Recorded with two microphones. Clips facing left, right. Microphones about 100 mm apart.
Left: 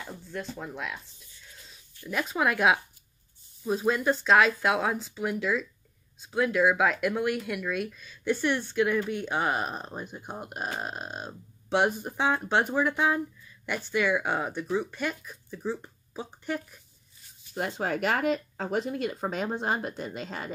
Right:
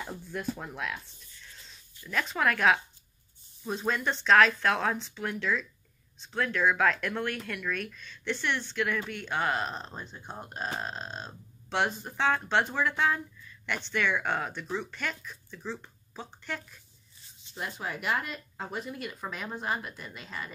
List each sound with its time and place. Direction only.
0.0 s speech: 5° right (ahead or behind)
2.0 s speech: 15° left (ahead or behind)
17.6 s speech: 85° left
19.4 s speech: 25° left (ahead or behind)
20.2 s speech: 75° left (ahead or behind)